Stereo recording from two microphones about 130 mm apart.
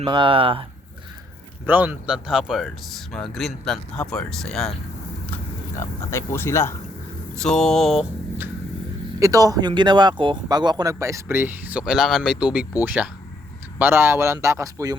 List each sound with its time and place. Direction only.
0.0 s speech: 40° right (ahead or behind)
1.6 s speech: 15° right (ahead or behind); by 4.7 s 5° left (ahead or behind)
6.1 s speech: 20° left (ahead or behind)
7.3 s speech: 5° left (ahead or behind)
9.2 s speech: 25° right (ahead or behind)